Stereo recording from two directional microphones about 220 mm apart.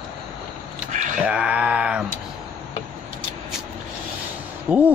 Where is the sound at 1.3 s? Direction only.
5° right (ahead or behind).